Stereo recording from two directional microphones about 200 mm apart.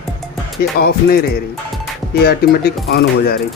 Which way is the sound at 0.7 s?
50° left (ahead or behind).